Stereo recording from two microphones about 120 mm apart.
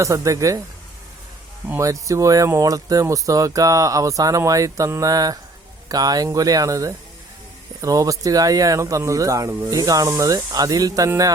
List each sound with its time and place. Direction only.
0.0 s speech: 25° right (ahead or behind)
1.8 s speech: 25° right (ahead or behind)